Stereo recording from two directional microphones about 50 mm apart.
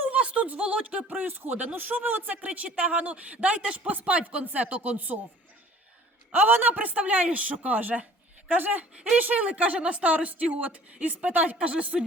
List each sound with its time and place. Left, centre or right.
0.1 s a sound: right
0.4 s speech: right
6.3 s speech: right
6.7 s speech: right